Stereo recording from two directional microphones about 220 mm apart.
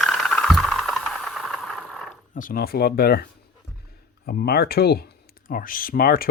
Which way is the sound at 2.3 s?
40° left (ahead or behind).